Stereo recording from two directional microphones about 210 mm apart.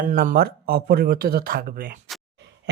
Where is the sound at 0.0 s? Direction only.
40° right (ahead or behind).